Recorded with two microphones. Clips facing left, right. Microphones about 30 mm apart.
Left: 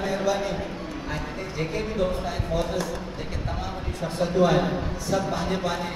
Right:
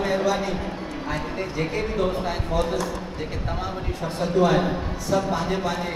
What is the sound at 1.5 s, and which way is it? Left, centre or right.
A man's voice, centre.